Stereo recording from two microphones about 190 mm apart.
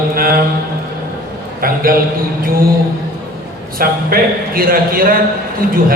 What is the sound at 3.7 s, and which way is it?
A man's voice, 50° right (ahead or behind).